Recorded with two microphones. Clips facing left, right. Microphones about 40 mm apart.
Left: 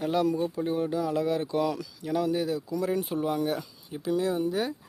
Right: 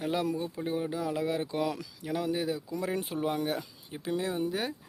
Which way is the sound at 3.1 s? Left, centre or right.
Right.